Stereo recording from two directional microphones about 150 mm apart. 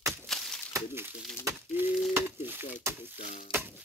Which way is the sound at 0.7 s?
15° right (ahead or behind).